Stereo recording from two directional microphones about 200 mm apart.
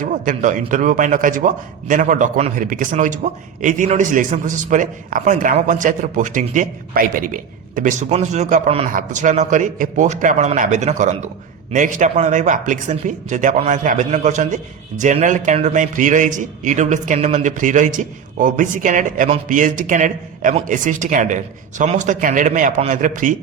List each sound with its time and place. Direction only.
0.0 s a man's voice: 40° right (ahead or behind)